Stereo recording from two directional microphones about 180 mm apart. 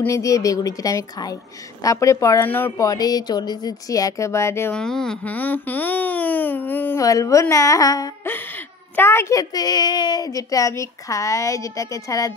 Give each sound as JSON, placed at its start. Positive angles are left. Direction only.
{"t": 0.0, "sound": "a woman's voice", "side_deg": 15}